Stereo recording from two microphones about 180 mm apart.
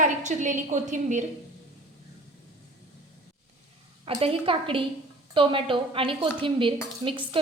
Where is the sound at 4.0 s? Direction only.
30° right (ahead or behind).